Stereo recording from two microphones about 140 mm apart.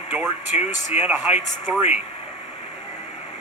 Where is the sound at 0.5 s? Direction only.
50° left (ahead or behind).